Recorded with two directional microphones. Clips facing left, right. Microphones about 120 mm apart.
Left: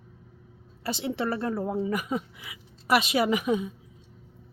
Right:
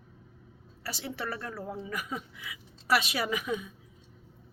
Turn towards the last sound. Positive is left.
turn(degrees=25)  # may be behind; listen again after turning